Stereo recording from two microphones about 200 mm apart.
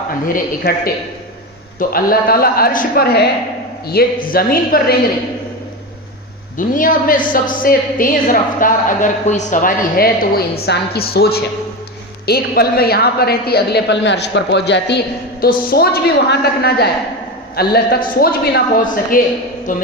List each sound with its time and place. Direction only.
0.3 s a woman's voice: 50° left (ahead or behind)
6.6 s a woman's voice: 40° left (ahead or behind)